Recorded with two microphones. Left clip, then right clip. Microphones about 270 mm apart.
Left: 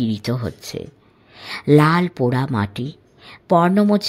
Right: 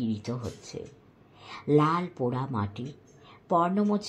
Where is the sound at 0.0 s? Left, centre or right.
Left.